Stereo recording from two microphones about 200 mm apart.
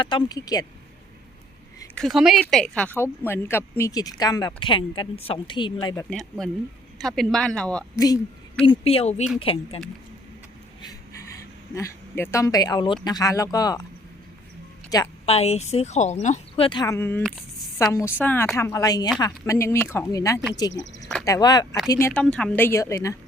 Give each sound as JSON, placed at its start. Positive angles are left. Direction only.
{"t": 0.0, "sound": "speech", "side_deg": 25}
{"t": 2.0, "sound": "a woman's voice", "side_deg": 0}
{"t": 6.1, "sound": "speech", "side_deg": 5}
{"t": 7.9, "sound": "speech", "side_deg": 20}
{"t": 11.7, "sound": "a woman's voice", "side_deg": 15}
{"t": 14.8, "sound": "a woman's voice", "side_deg": 15}
{"t": 15.3, "sound": "a woman's voice", "side_deg": 30}